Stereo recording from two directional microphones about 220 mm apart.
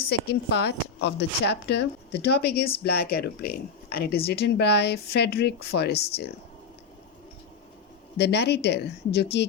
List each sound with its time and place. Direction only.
0.1 s speech: 50° left (ahead or behind)
8.2 s speech: 50° left (ahead or behind)